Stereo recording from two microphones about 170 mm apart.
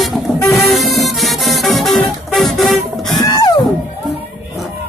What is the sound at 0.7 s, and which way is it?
Music, centre (ahead or behind).